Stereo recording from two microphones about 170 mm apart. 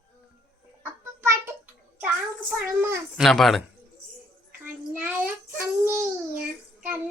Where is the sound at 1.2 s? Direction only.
15° right (ahead or behind).